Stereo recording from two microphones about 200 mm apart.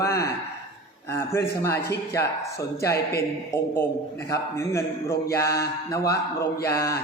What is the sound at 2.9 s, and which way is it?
Speech, 50° left (ahead or behind).